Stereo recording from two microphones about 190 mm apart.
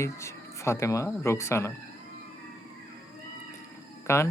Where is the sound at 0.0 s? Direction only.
15° left (ahead or behind).